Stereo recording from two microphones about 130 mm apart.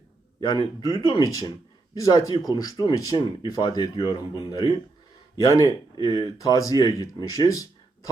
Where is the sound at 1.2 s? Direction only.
25° left (ahead or behind).